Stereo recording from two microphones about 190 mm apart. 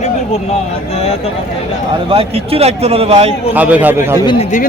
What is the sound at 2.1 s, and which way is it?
A man's voice, 30° right (ahead or behind).